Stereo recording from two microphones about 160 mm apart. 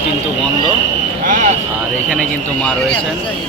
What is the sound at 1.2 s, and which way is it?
Vehicle, 60° right (ahead or behind).